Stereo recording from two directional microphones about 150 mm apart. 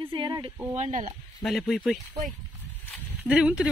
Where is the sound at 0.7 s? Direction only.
55° right (ahead or behind).